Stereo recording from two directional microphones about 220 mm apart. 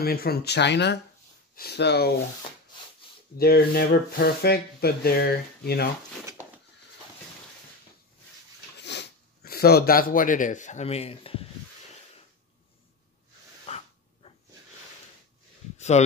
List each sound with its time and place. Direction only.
0.0 s speech: 45° left (ahead or behind)
3.3 s speech: 45° left (ahead or behind)
8.7 s speech: 50° left (ahead or behind); by 11.4 s 25° left (ahead or behind)
13.7 s dog: 30° left (ahead or behind)